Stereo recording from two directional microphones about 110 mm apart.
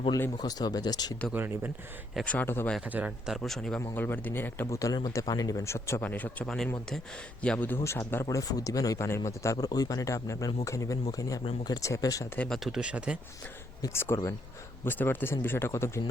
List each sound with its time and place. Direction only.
0.4 s speech: 35° left (ahead or behind)
1.3 s speech: 15° right (ahead or behind)
2.2 s speech: 15° left (ahead or behind)
2.8 s speech: 10° right (ahead or behind)
3.3 s speech: centre (ahead or behind)
3.9 s speech: 15° left (ahead or behind)
6.0 s speech: 15° left (ahead or behind)
7.9 s speech: 25° left (ahead or behind)
12.4 s speech: centre (ahead or behind)
13.8 s speech: 20° left (ahead or behind)